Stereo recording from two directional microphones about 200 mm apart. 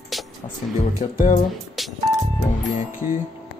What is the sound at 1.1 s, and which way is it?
Speech, 40° left (ahead or behind).